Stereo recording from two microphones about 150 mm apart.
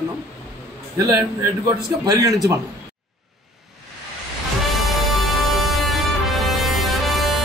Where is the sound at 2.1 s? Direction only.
25° right (ahead or behind).